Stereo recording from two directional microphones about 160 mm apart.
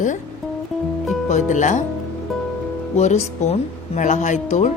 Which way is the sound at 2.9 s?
45° left (ahead or behind).